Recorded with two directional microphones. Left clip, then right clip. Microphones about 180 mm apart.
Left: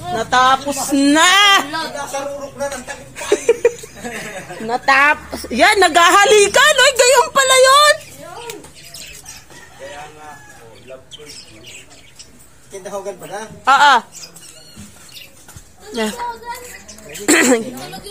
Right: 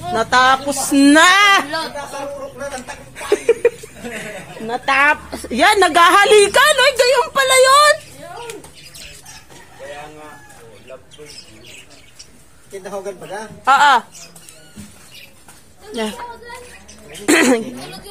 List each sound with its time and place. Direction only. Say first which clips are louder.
0.1 s speech: even; 35° right (ahead or behind)
1.2 s speech: even; 20° right (ahead or behind)
3.2 s a woman's voice: left 1 dB; 5° left (ahead or behind)
6.8 s speech: left 2 dB; 15° left (ahead or behind); by 8.0 s centre (ahead or behind)
13.7 s a woman's voice: left 1 dB; centre (ahead or behind)
17.3 s a woman's voice: even; centre (ahead or behind)